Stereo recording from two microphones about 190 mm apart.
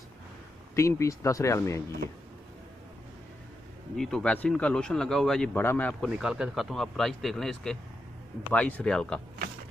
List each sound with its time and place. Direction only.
0.7 s speech: 15° left (ahead or behind)
3.9 s speech: 5° left (ahead or behind)